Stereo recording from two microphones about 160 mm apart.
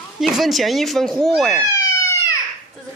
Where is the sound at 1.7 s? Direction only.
20° left (ahead or behind).